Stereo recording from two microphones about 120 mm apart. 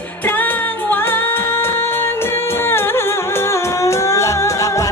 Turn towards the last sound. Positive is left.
turn(degrees=25)  # may be behind; listen again after turning